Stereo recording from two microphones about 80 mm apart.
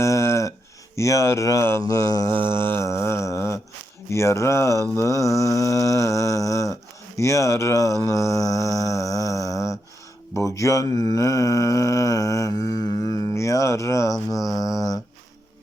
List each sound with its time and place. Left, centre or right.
0.0 s a sound: left
0.9 s mantra: left
1.8 s mantra: left
2.3 s mantra: left
8.0 s a sound: left
10.3 s mantra: left